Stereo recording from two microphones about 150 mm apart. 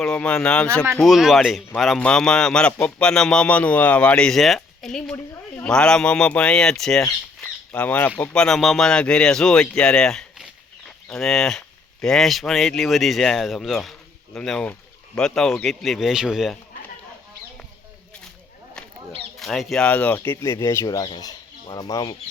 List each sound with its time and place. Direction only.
0.0 s speech: 5° left (ahead or behind)
7.4 s squawk: 10° left (ahead or behind)
8.2 s speech: 5° left (ahead or behind)
19.4 s speech: centre (ahead or behind); by 22.1 s 25° left (ahead or behind)